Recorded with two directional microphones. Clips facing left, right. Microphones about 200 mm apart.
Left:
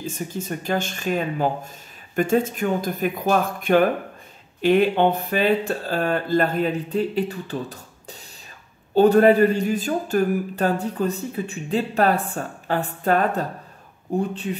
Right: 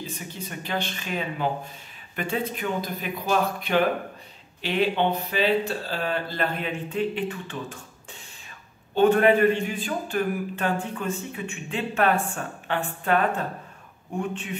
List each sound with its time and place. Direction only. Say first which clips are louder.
0.0 s a man's voice: left 6 dB; 45° left (ahead or behind)